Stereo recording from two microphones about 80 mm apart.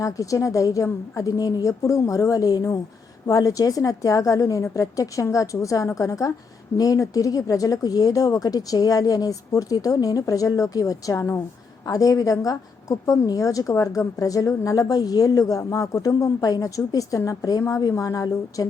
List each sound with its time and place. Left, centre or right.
0.0 s a woman's voice: left